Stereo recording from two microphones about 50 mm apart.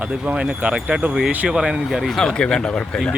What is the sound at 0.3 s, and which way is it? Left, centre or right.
Speech, centre.